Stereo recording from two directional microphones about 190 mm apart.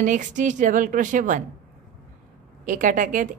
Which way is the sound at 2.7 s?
40° right (ahead or behind).